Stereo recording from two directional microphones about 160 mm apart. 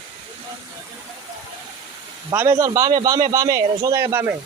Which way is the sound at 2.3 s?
20° right (ahead or behind).